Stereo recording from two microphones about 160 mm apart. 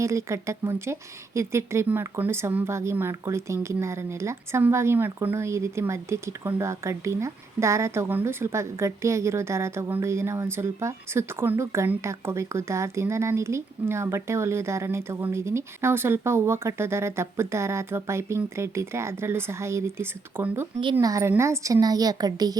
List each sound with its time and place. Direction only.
0.0 s a woman's voice: 20° right (ahead or behind)